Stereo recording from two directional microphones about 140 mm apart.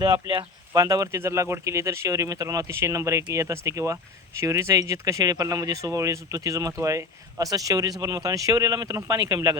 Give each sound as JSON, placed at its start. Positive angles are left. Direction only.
{"t": 0.0, "sound": "speech", "side_deg": -30}